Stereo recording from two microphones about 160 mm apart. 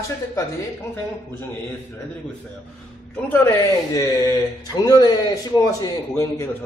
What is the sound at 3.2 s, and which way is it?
Speech, 15° left (ahead or behind).